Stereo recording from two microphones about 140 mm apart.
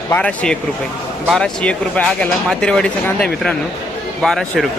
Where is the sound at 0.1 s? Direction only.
10° left (ahead or behind).